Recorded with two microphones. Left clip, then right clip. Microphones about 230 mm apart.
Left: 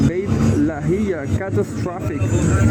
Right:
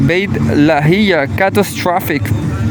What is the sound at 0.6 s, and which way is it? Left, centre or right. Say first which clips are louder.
Speech: right 10 dB; right.